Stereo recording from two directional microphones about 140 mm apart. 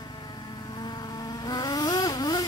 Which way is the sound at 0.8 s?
30° left (ahead or behind).